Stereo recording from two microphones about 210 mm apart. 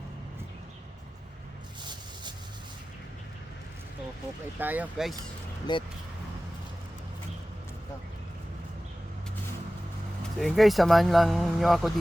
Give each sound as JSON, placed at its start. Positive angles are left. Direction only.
{"t": 4.5, "sound": "speech", "side_deg": -10}
{"t": 5.7, "sound": "speech", "side_deg": 20}
{"t": 10.3, "sound": "speech", "side_deg": 0}